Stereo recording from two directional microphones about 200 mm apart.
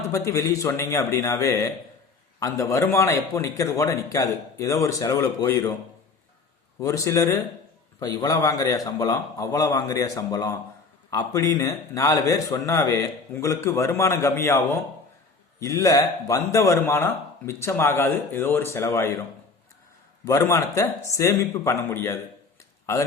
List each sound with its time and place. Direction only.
0.1 s speech: 15° left (ahead or behind)
6.7 s speech: 15° left (ahead or behind)
20.2 s speech: 15° left (ahead or behind)